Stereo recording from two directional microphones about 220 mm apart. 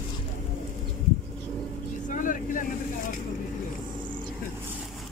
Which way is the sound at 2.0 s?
35° left (ahead or behind).